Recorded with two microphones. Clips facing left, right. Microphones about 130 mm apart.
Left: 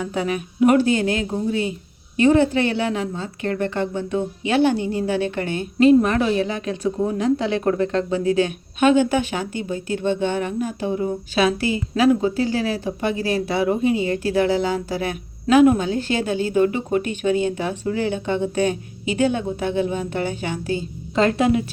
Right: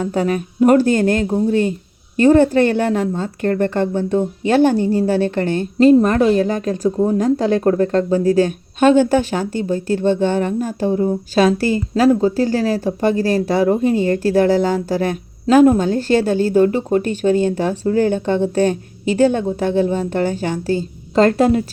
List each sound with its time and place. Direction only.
0.0 s a woman's voice: 40° right (ahead or behind)